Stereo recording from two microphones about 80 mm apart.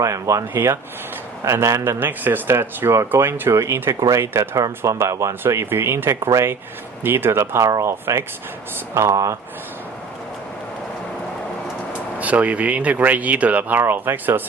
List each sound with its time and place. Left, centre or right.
0.0 s speech: right
12.2 s speech: centre